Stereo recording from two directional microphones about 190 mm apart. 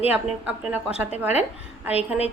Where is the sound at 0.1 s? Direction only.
10° right (ahead or behind).